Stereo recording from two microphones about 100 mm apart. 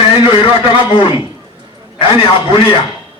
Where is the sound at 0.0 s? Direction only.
65° left (ahead or behind).